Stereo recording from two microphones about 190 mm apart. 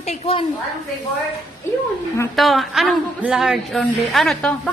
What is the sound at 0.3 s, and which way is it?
Speech, 30° left (ahead or behind).